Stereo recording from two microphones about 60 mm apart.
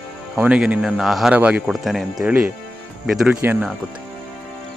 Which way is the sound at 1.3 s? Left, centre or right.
Right.